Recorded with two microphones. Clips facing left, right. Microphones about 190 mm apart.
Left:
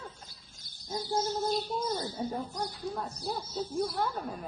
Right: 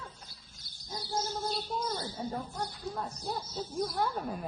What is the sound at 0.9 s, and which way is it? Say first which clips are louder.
Bird: left 4 dB; 50° left (ahead or behind).